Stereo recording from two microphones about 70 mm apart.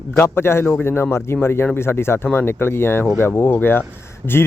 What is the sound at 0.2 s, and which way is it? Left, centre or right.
Speech, left.